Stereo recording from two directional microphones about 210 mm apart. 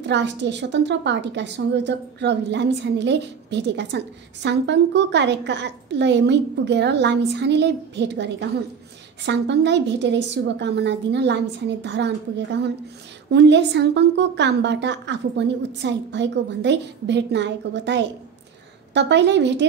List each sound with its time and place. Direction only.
0.0 s a woman's voice: 55° right (ahead or behind)